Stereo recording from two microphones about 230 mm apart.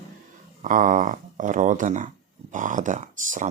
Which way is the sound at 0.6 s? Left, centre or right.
Right.